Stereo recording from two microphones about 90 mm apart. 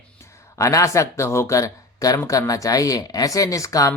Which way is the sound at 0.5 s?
35° left (ahead or behind).